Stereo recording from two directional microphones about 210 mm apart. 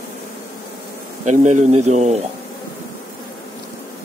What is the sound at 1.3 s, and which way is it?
Speech, 35° right (ahead or behind).